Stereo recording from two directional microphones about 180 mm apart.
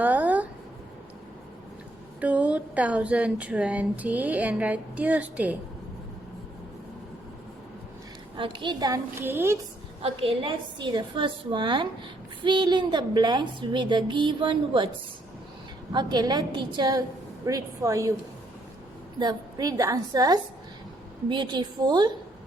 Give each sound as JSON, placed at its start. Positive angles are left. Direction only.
{"t": 0.0, "sound": "a sound", "side_deg": -10}
{"t": 2.2, "sound": "speech", "side_deg": -10}
{"t": 8.4, "sound": "a woman's voice", "side_deg": -25}
{"t": 10.0, "sound": "a woman's voice", "side_deg": -30}
{"t": 15.9, "sound": "a woman's voice", "side_deg": -25}
{"t": 19.2, "sound": "a woman's voice", "side_deg": -20}